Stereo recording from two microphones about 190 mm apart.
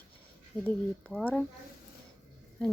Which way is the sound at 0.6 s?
5° left (ahead or behind).